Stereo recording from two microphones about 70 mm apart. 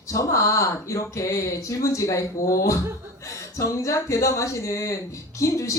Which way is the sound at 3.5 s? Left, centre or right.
Left.